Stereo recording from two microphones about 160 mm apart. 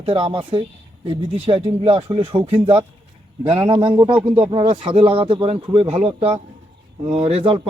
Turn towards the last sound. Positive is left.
turn(degrees=-35)  # may be behind; listen again after turning